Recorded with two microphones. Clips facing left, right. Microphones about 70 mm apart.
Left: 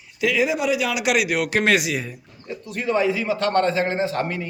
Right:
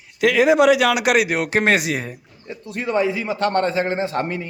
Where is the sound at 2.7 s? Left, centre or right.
Right.